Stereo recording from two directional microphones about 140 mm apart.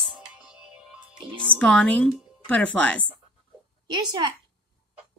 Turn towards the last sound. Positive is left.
turn(degrees=-30)  # may be behind; listen again after turning